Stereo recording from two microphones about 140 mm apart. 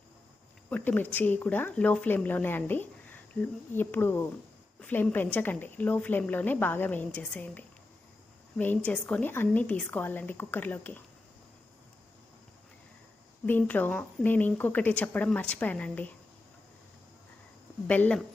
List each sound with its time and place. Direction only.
0.7 s speech: 15° left (ahead or behind)
13.4 s speech: 10° left (ahead or behind)
17.8 s speech: 10° left (ahead or behind)